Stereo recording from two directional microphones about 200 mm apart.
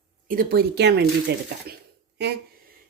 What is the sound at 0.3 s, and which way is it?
A woman's voice, 50° right (ahead or behind).